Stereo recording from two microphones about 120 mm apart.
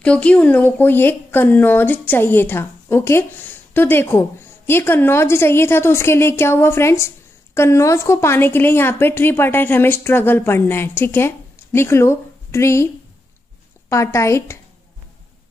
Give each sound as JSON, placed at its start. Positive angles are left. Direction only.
{"t": 0.0, "sound": "speech", "side_deg": 10}
{"t": 13.8, "sound": "speech", "side_deg": 25}